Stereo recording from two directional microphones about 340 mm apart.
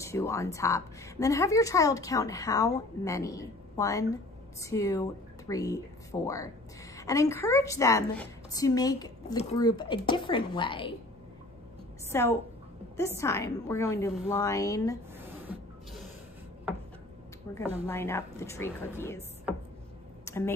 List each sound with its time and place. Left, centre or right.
0.0 s a woman's voice: centre
12.1 s a woman's voice: centre
15.1 s spray: centre
17.8 s a woman's voice: centre
20.2 s a sound: centre